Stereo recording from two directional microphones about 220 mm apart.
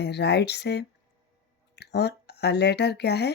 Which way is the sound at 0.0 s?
50° left (ahead or behind).